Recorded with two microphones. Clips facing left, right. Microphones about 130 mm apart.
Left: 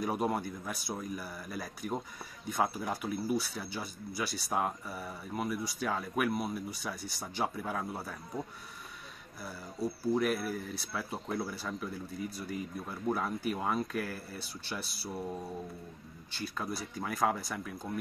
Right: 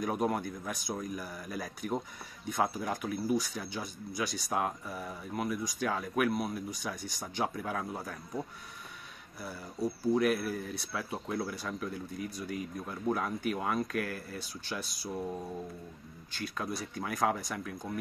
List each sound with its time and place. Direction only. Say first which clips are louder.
0.0 s speech: right 1 dB; 5° left (ahead or behind)